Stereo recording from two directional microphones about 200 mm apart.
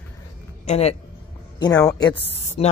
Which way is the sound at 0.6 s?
30° left (ahead or behind).